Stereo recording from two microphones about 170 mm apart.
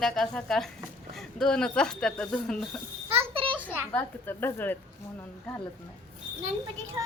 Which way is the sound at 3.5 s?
10° right (ahead or behind).